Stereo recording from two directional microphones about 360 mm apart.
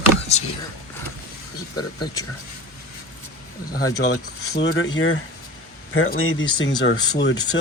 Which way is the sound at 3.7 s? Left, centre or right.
Left.